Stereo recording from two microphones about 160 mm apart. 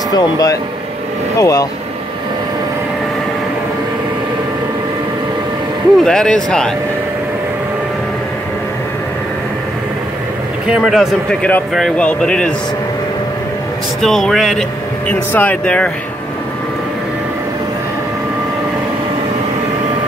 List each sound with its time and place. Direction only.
0.1 s speech: 20° left (ahead or behind)
5.9 s a man's voice: 5° left (ahead or behind)
10.7 s a man's voice: centre (ahead or behind)
14.0 s a man's voice: centre (ahead or behind)